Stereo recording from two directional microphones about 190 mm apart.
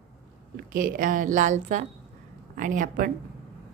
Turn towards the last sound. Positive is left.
turn(degrees=-45)  # may be behind; listen again after turning